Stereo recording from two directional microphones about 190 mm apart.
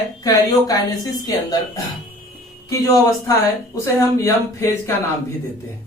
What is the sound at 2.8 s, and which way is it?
Speech, 20° left (ahead or behind).